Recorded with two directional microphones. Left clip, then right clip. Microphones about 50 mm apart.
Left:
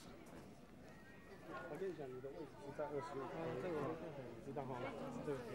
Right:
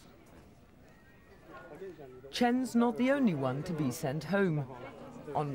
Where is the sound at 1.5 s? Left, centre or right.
Left.